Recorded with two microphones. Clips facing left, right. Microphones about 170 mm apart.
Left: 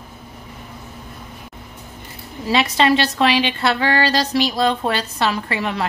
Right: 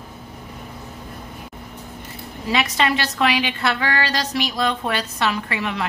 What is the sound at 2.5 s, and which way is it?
A woman's voice, 30° left (ahead or behind).